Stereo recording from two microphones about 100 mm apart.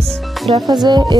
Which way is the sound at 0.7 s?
45° right (ahead or behind).